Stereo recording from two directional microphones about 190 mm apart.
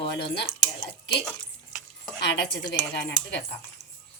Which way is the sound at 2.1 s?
65° left (ahead or behind).